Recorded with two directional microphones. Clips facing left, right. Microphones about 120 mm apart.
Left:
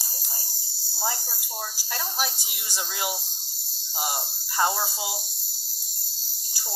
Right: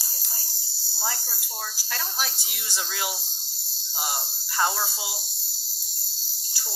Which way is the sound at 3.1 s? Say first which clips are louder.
Left 3 dB; 50° left (ahead or behind).